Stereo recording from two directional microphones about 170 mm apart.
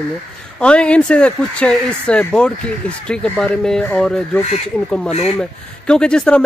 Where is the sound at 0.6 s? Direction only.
5° left (ahead or behind).